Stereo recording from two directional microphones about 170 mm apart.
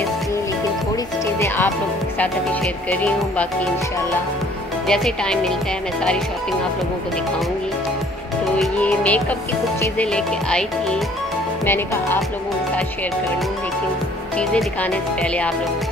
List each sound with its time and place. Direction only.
1.2 s music: 15° left (ahead or behind)
4.8 s speech: 5° left (ahead or behind)
8.5 s music: 10° left (ahead or behind)
14.3 s music: 5° left (ahead or behind)